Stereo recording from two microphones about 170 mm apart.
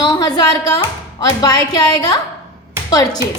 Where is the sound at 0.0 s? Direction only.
25° left (ahead or behind).